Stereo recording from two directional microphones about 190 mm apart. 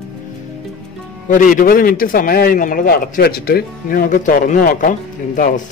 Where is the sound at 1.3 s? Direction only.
45° left (ahead or behind).